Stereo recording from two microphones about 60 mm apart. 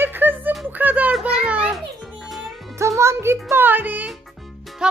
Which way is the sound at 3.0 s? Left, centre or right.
Right.